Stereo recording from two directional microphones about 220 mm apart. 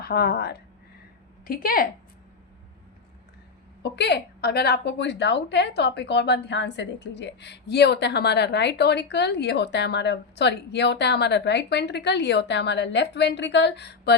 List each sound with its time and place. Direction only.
0.0 s a woman's voice: 45° left (ahead or behind)
3.9 s a woman's voice: 50° left (ahead or behind)